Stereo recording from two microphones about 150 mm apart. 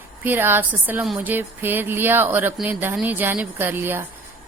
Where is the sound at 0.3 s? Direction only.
15° right (ahead or behind).